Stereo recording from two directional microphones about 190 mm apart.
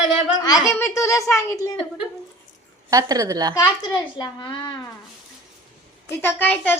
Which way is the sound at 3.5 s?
20° left (ahead or behind).